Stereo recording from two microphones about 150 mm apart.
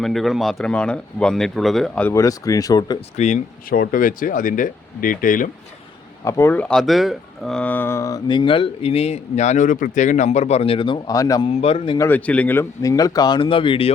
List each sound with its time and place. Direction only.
0.0 s speech: centre (ahead or behind)
2.0 s speech: 20° left (ahead or behind)
3.2 s speech: 50° left (ahead or behind)
3.7 s speech: 70° left (ahead or behind)
6.2 s speech: 20° left (ahead or behind); by 11.0 s 35° left (ahead or behind)
11.0 s speech: 25° left (ahead or behind)
11.4 s speech: 40° left (ahead or behind)
11.9 s speech: 15° left (ahead or behind); by 13.9 s 35° left (ahead or behind)